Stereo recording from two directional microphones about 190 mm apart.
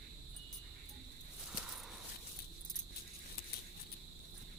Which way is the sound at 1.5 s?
5° right (ahead or behind).